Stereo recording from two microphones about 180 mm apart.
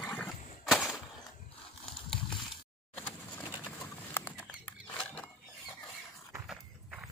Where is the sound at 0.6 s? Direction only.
Centre (ahead or behind).